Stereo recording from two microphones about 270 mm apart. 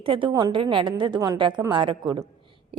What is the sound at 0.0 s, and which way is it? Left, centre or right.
A woman's voice, centre.